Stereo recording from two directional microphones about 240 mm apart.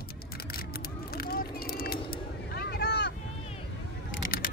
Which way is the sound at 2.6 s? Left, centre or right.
Left.